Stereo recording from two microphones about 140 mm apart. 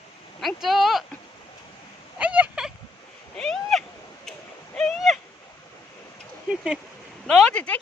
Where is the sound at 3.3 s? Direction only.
5° left (ahead or behind).